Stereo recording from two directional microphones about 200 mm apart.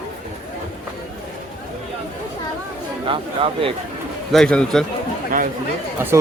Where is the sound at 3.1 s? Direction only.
25° right (ahead or behind).